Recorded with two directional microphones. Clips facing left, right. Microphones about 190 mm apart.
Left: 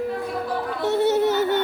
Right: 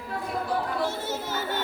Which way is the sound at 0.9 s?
70° left (ahead or behind).